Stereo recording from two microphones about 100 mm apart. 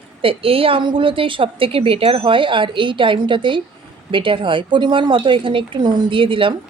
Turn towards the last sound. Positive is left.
turn(degrees=-60)  # may be behind; listen again after turning